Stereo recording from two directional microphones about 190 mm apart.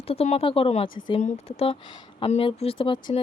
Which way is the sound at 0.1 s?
30° left (ahead or behind).